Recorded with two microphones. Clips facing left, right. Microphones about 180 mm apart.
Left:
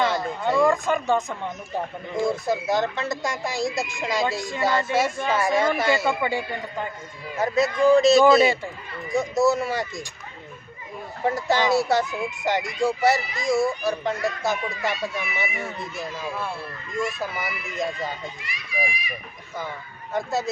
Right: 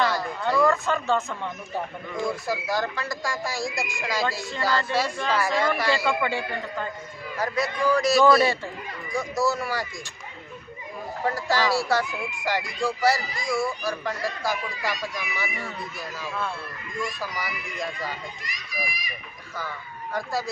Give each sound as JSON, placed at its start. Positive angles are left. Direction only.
{"t": 0.0, "sound": "speech", "side_deg": 20}
{"t": 11.3, "sound": "speech", "side_deg": 20}
{"t": 18.4, "sound": "a child's voice", "side_deg": -40}
{"t": 20.1, "sound": "speech", "side_deg": 25}